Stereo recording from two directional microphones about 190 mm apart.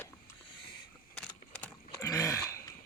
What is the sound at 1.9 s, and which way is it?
Throat clearing, 15° left (ahead or behind).